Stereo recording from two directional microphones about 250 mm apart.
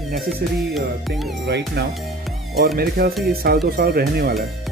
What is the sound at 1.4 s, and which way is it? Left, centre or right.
Speech, right.